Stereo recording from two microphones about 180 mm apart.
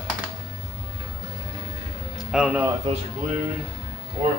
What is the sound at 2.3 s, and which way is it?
Speech, 5° right (ahead or behind).